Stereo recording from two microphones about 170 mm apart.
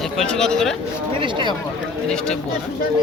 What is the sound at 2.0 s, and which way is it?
Speech, 5° left (ahead or behind).